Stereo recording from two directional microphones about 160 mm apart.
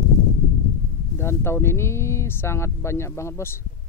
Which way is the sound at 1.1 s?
15° left (ahead or behind).